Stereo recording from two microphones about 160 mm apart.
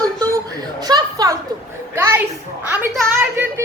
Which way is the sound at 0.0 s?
25° right (ahead or behind).